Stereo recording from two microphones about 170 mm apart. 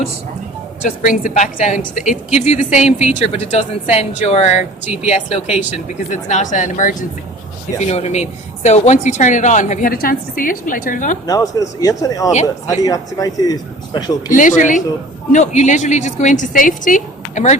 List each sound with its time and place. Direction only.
0.9 s a woman's voice: 50° left (ahead or behind)
11.3 s a man's voice: 20° left (ahead or behind)
14.3 s a woman's voice: 50° left (ahead or behind)